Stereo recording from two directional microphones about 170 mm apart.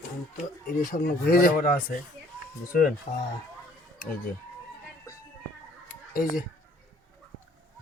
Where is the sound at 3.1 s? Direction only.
50° left (ahead or behind).